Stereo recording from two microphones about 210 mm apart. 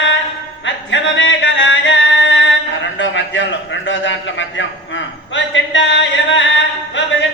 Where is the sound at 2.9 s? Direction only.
60° left (ahead or behind).